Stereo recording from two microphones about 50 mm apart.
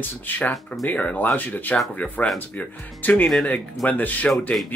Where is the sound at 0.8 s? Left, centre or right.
Left.